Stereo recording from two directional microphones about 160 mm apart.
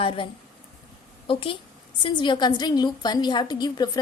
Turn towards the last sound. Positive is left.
turn(degrees=25)  # may be behind; listen again after turning